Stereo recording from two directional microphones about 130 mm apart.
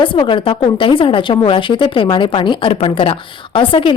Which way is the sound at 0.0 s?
40° left (ahead or behind).